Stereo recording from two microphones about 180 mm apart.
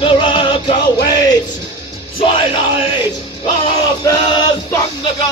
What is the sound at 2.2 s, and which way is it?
Music, 30° left (ahead or behind).